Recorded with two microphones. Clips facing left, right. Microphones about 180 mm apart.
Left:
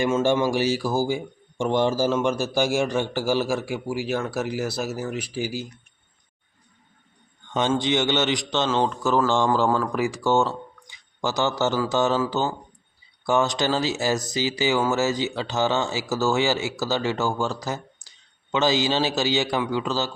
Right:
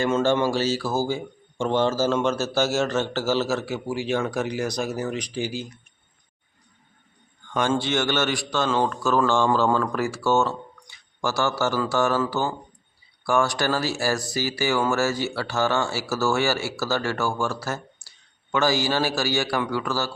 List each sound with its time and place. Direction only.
0.0 s speech: 15° left (ahead or behind)
7.7 s speech: 15° left (ahead or behind)
10.8 s a sound: 20° left (ahead or behind)
11.9 s speech: 20° left (ahead or behind)
13.2 s speech: 20° left (ahead or behind)